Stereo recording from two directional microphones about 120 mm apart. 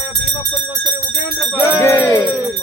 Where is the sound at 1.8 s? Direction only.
20° left (ahead or behind).